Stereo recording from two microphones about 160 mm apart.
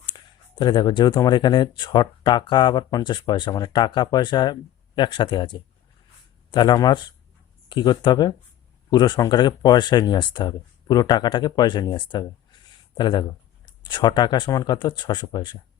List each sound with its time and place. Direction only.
0.6 s speech: 30° left (ahead or behind)